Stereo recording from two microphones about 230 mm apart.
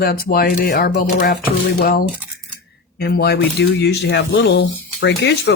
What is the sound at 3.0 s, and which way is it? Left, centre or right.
Speech, left.